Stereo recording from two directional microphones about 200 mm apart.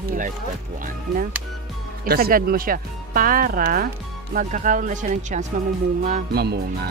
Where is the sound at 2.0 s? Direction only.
45° right (ahead or behind).